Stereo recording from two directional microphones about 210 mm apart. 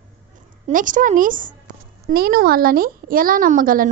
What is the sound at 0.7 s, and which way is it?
A woman's voice, 40° right (ahead or behind).